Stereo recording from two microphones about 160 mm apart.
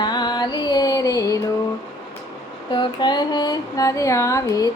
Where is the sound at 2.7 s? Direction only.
30° left (ahead or behind).